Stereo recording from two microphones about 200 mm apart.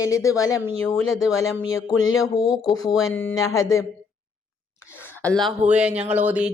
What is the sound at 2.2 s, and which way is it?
Speech, 20° left (ahead or behind).